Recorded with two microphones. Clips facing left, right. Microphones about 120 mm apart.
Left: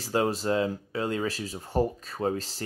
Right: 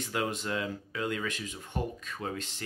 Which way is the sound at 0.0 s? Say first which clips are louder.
Left 6 dB; 35° left (ahead or behind).